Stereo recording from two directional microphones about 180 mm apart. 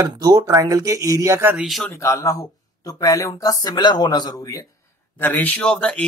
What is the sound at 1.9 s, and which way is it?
Speech, 15° left (ahead or behind).